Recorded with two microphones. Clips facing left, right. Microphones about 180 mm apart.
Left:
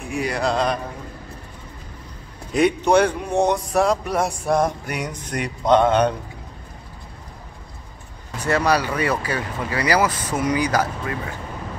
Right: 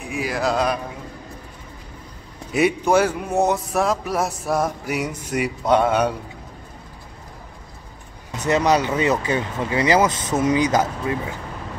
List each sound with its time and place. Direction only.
0.0 s speech: centre (ahead or behind)
2.5 s speech: 5° right (ahead or behind)
8.3 s speech: 20° right (ahead or behind)